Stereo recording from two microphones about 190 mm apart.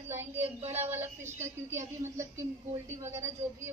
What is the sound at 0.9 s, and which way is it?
A woman's voice, 10° right (ahead or behind).